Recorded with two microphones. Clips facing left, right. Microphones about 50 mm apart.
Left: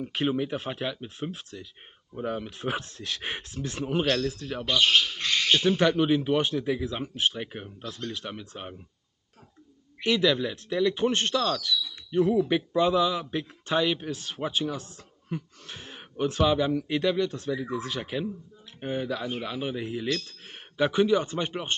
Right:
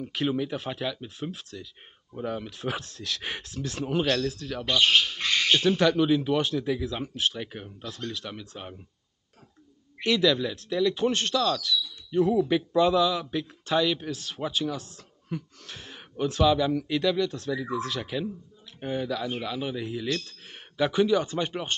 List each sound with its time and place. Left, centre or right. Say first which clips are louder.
0.0 s speech: left 1 dB; centre
4.7 s speech: even; centre
5.8 s speech: right 1 dB; left
10.0 s speech: even; centre